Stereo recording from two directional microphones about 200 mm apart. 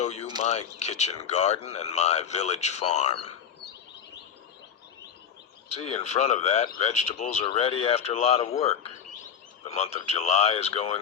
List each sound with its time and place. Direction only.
0.0 s speech: 35° left (ahead or behind)
5.6 s speech: 35° left (ahead or behind)